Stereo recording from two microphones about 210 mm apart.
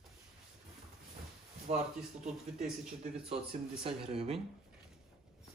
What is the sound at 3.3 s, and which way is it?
Speech, 25° right (ahead or behind).